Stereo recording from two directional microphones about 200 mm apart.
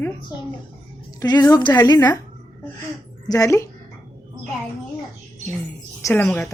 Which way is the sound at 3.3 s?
15° left (ahead or behind).